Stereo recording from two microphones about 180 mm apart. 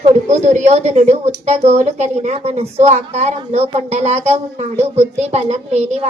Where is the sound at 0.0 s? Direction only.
40° right (ahead or behind).